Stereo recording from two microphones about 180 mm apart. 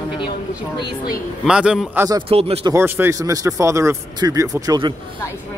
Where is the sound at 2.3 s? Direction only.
30° right (ahead or behind).